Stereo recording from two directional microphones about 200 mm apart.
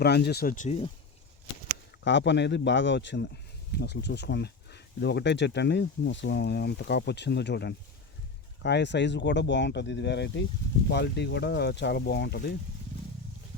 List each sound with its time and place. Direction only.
0.0 s speech: 55° left (ahead or behind); by 0.9 s 35° left (ahead or behind)
2.0 s speech: 65° left (ahead or behind)